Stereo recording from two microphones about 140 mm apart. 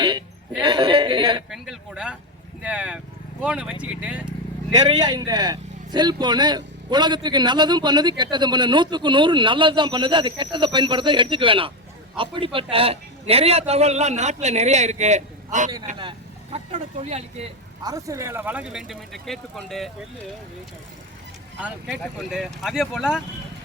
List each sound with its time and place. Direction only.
0.0 s a sound: 35° right (ahead or behind)
1.5 s a sound: 5° right (ahead or behind)
2.6 s speech: 10° right (ahead or behind)
4.7 s a man's voice: 30° right (ahead or behind); by 15.7 s 60° right (ahead or behind)
16.0 s vehicle: 35° right (ahead or behind)
16.7 s a man's voice: 50° right (ahead or behind)
17.8 s speech: 25° right (ahead or behind); by 19.9 s 5° left (ahead or behind)
21.6 s speech: 5° right (ahead or behind)